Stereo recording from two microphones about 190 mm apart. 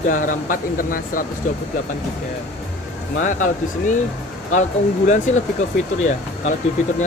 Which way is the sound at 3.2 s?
40° left (ahead or behind).